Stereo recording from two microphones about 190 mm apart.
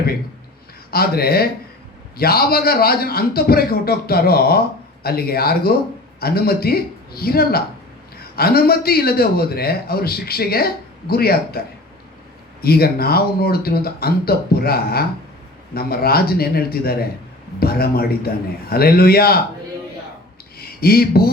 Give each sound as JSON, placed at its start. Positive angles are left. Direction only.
{"t": 0.9, "sound": "a man's voice", "side_deg": 55}
{"t": 12.6, "sound": "a man's voice", "side_deg": 55}
{"t": 20.6, "sound": "a sound", "side_deg": 55}